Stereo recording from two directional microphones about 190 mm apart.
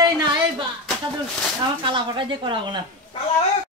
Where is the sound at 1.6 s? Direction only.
25° right (ahead or behind).